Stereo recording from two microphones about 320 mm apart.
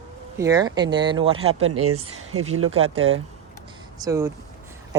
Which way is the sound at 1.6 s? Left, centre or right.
Right.